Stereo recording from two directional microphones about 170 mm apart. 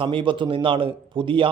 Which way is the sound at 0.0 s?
30° right (ahead or behind).